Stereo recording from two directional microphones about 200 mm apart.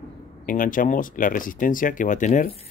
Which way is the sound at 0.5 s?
40° left (ahead or behind).